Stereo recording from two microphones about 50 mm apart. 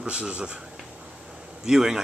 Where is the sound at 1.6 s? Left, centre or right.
Centre.